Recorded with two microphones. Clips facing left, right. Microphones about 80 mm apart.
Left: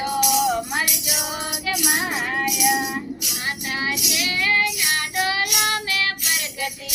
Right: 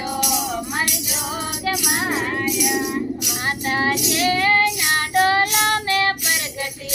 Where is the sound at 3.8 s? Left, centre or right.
Right.